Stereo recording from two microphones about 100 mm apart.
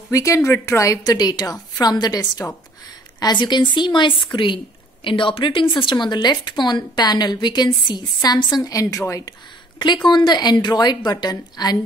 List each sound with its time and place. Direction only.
0.1 s a woman's voice: 30° left (ahead or behind)
10.0 s speech: 50° left (ahead or behind)